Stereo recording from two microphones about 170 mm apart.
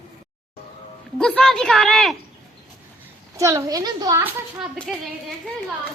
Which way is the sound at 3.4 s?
20° right (ahead or behind).